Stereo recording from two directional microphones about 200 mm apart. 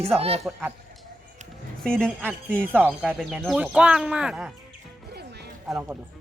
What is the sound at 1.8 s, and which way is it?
Speech, 5° left (ahead or behind).